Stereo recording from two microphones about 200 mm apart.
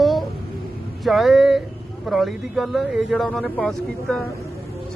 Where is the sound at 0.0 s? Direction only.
Centre (ahead or behind).